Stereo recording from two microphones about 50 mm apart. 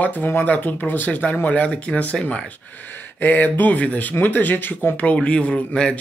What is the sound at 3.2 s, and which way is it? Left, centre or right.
A man's voice, left.